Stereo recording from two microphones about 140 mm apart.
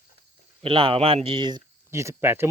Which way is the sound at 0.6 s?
40° right (ahead or behind).